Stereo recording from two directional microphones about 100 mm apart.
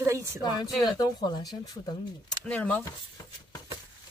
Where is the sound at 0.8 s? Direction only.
40° left (ahead or behind).